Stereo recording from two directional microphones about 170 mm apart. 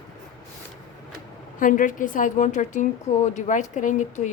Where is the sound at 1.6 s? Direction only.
50° left (ahead or behind).